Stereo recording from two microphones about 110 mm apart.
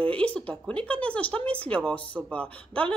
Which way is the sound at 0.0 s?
10° left (ahead or behind).